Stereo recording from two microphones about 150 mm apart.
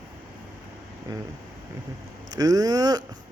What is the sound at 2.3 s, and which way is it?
Speech, 25° right (ahead or behind).